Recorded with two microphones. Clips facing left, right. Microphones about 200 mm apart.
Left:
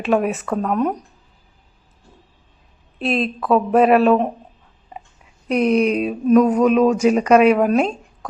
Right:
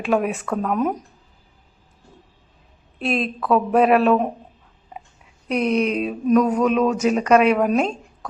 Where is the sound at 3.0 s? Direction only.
Centre (ahead or behind).